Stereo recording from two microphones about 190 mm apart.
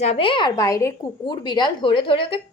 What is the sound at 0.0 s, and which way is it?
A woman's voice, 30° left (ahead or behind).